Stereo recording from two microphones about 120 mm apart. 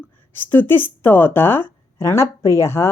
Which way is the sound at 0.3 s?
15° left (ahead or behind).